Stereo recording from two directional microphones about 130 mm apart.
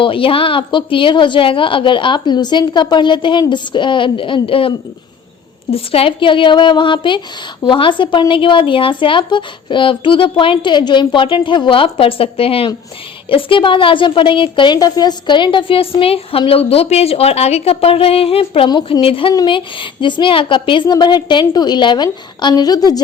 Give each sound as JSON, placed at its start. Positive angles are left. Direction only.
{"t": 0.0, "sound": "a woman's voice", "side_deg": 45}
{"t": 5.7, "sound": "a woman's voice", "side_deg": 50}